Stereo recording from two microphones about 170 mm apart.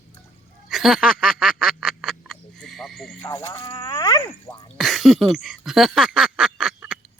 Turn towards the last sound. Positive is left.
turn(degrees=-5)  # may be behind; listen again after turning